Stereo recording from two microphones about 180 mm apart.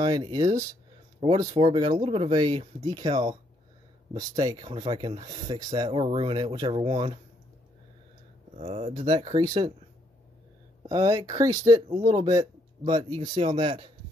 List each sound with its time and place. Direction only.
0.0 s speech: 20° right (ahead or behind)
8.5 s speech: 40° right (ahead or behind)
9.3 s speech: 25° right (ahead or behind)
10.8 s speech: 20° right (ahead or behind)